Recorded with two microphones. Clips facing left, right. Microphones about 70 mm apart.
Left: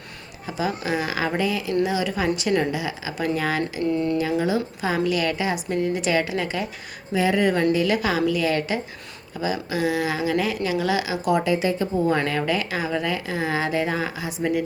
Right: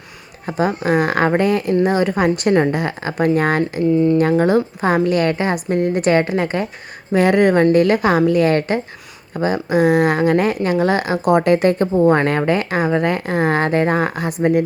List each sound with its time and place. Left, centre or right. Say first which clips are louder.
0.4 s speech: right 8 dB; right
7.1 s speech: right 7 dB; right
11.9 s speech: right 7 dB; right